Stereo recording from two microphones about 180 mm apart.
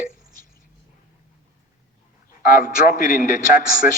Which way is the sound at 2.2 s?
50° left (ahead or behind).